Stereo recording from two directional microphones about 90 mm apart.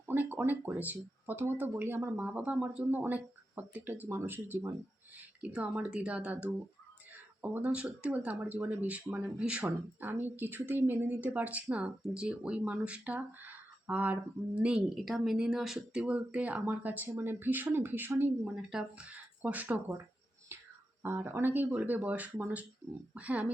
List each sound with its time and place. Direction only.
0.0 s speech: 20° right (ahead or behind)
5.5 s speech: 15° right (ahead or behind)
7.6 s speech: 15° right (ahead or behind)
18.4 s speech: 10° right (ahead or behind)
21.0 s speech: 25° right (ahead or behind)